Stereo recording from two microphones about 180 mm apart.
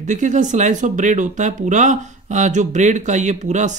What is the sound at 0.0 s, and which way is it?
Speech, 40° right (ahead or behind).